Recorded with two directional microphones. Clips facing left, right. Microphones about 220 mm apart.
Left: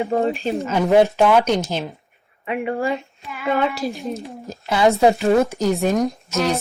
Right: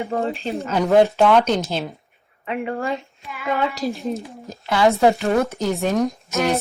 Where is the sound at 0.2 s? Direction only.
15° left (ahead or behind).